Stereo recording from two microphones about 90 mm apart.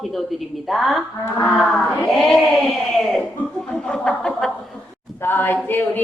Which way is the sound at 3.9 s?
5° left (ahead or behind).